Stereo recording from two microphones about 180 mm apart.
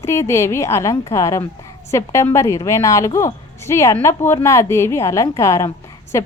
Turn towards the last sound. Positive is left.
turn(degrees=15)  # may be behind; listen again after turning